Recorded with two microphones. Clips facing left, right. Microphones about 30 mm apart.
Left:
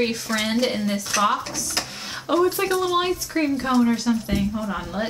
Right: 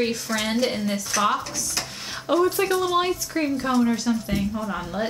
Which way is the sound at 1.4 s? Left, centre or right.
Left.